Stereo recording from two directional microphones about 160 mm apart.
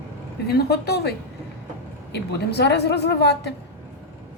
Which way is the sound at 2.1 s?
90° left.